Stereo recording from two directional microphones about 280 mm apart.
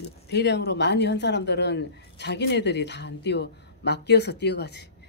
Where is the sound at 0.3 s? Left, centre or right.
Left.